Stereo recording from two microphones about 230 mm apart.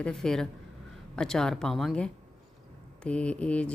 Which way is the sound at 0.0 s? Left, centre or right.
Centre.